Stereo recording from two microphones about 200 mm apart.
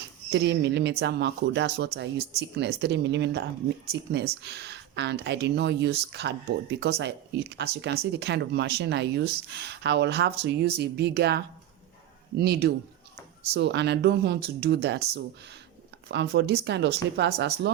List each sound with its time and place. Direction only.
0.3 s speech: 60° right (ahead or behind)
4.4 s speech: 55° right (ahead or behind)